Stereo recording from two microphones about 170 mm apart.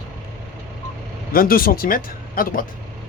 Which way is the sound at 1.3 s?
60° left (ahead or behind).